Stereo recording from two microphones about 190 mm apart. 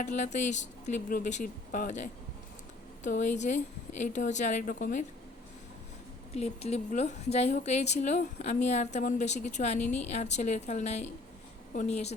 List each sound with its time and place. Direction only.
0.0 s a woman's voice: 40° left (ahead or behind)
6.3 s a woman's voice: 35° left (ahead or behind)